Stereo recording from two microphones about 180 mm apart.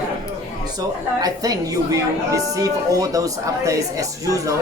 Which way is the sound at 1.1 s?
20° right (ahead or behind).